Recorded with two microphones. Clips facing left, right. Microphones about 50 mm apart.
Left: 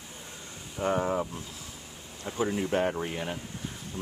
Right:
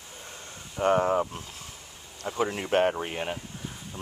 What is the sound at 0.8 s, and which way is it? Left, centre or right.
Speech, right.